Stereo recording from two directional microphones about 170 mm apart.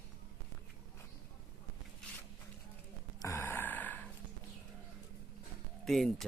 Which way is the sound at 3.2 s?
15° left (ahead or behind).